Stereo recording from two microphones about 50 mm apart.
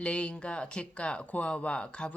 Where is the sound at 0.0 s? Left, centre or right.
Left.